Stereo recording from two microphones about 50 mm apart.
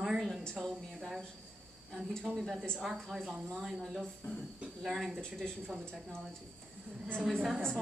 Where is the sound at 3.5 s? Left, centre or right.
Centre.